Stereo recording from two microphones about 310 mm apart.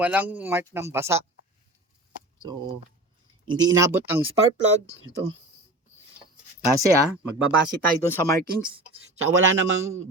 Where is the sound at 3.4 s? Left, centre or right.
Centre.